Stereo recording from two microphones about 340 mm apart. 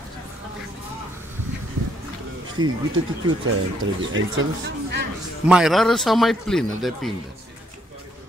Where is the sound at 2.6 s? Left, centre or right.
Right.